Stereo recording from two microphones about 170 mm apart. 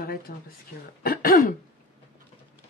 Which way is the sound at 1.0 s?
60° left (ahead or behind).